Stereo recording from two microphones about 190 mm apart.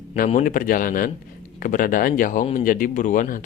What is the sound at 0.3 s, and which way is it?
Speech, 45° left (ahead or behind).